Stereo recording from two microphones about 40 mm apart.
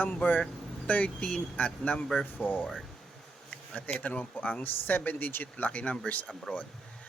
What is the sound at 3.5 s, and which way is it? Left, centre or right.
Bee, left.